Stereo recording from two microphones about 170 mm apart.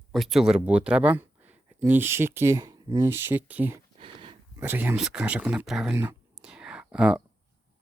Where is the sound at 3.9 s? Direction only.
30° right (ahead or behind).